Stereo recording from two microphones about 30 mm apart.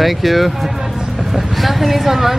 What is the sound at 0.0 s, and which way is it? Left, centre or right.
Speech, centre.